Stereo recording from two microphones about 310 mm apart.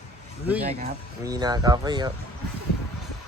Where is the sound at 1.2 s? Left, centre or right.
Centre.